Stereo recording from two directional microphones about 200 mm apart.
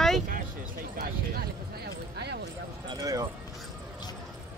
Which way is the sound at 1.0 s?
50° right (ahead or behind).